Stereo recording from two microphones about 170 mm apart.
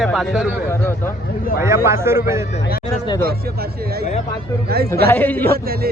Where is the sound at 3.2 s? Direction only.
65° right (ahead or behind).